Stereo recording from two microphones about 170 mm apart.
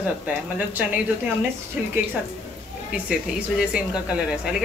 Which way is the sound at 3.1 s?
5° right (ahead or behind).